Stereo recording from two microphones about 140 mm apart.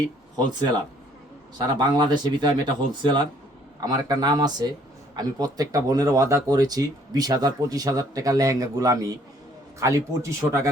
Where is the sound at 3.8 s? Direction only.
30° right (ahead or behind).